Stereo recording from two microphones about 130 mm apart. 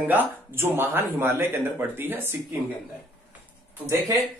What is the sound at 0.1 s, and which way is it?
Speech, 15° right (ahead or behind).